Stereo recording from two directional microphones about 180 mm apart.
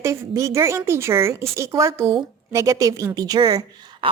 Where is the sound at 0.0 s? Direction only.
15° right (ahead or behind).